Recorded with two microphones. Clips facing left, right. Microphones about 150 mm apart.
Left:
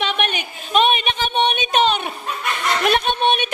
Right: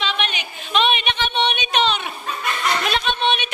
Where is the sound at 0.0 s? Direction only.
50° left (ahead or behind).